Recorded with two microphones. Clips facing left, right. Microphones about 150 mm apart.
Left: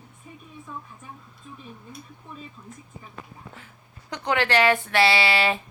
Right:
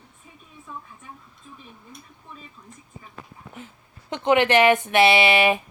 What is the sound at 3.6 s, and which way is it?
Speech, 20° right (ahead or behind).